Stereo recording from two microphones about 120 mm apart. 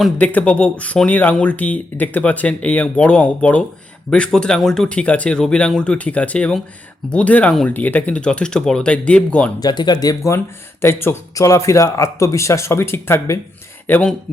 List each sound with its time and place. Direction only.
0.2 s speech: 15° left (ahead or behind)
9.6 s speech: 35° left (ahead or behind); by 14.1 s 15° left (ahead or behind)